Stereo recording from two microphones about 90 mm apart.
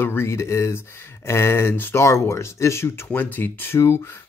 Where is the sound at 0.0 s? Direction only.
25° left (ahead or behind).